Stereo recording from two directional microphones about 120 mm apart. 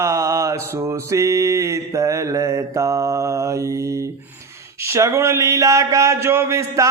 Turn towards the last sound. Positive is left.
turn(degrees=-25)  # may be behind; listen again after turning